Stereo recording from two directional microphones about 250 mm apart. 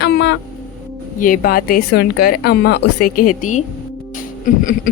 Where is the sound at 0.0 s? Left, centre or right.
Left.